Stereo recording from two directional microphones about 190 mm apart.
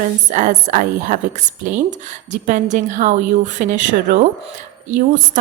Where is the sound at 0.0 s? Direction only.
40° right (ahead or behind).